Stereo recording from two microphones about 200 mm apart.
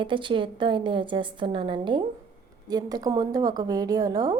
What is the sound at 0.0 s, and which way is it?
A woman's voice, 25° right (ahead or behind).